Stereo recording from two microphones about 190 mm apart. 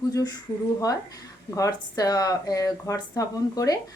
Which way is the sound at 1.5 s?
15° left (ahead or behind).